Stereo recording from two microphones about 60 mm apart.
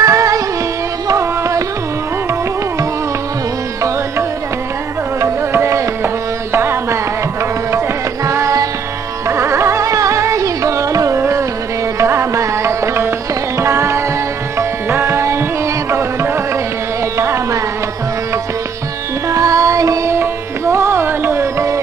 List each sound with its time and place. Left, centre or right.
0.0 s music: right
5.5 s music: right
8.3 s music: right
11.1 s music: right
19.2 s music: right
20.1 s music: right